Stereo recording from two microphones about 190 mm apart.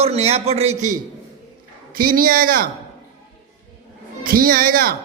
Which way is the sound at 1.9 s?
50° right (ahead or behind).